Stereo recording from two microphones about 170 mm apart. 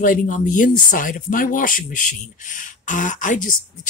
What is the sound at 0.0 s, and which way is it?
Speech, 50° left (ahead or behind).